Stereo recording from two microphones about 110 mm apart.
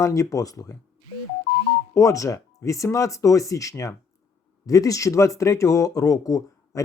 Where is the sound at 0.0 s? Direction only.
30° left (ahead or behind).